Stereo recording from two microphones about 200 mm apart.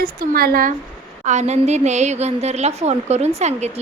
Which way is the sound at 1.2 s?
35° right (ahead or behind).